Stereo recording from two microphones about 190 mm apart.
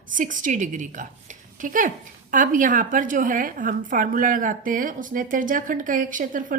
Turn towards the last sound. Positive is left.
turn(degrees=-45)  # may be behind; listen again after turning